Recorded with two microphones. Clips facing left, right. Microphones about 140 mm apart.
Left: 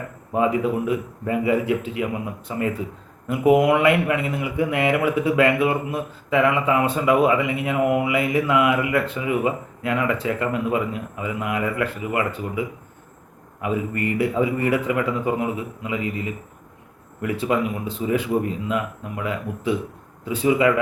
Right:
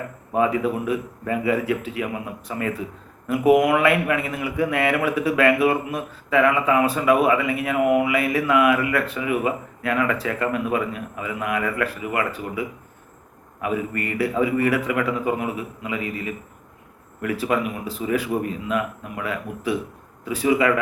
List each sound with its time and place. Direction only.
0.3 s speech: 20° left (ahead or behind)